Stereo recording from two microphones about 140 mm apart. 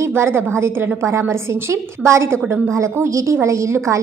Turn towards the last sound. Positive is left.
turn(degrees=-20)  # may be behind; listen again after turning